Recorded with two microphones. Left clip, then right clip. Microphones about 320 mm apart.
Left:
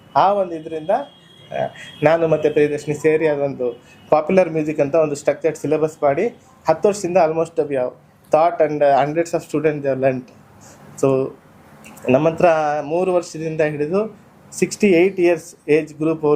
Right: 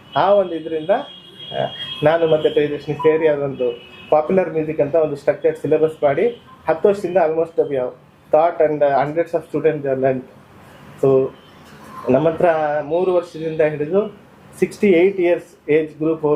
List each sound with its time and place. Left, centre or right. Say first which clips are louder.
0.1 s speech: right 1 dB; centre
2.0 s speech: even; left
12.0 s speech: left 1 dB; left